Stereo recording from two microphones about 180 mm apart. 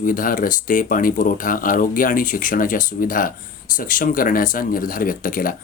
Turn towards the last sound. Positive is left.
turn(degrees=50)  # may be behind; listen again after turning